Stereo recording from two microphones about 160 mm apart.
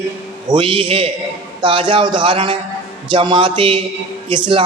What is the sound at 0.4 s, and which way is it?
Speech, 30° right (ahead or behind).